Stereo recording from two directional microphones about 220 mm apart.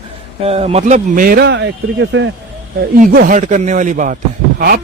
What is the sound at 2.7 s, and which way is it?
Speech, 40° right (ahead or behind).